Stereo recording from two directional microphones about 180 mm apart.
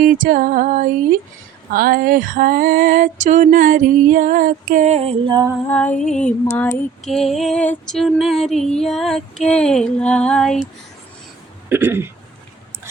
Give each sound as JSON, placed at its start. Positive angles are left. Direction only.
{"t": 0.0, "sound": "music", "side_deg": -50}
{"t": 5.6, "sound": "female singing", "side_deg": 10}
{"t": 11.7, "sound": "speech", "side_deg": -10}